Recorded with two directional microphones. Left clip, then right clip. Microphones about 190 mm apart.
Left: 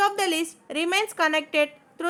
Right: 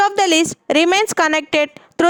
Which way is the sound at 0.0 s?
55° right (ahead or behind).